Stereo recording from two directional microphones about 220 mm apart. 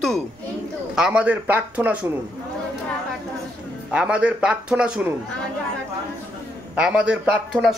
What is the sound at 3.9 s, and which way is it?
A man's voice, 5° right (ahead or behind).